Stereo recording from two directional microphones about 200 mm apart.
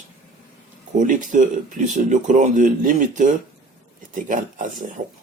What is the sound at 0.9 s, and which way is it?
Speech, 40° right (ahead or behind).